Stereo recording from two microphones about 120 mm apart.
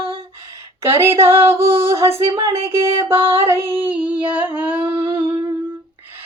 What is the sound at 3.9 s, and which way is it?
Female singing, 10° right (ahead or behind).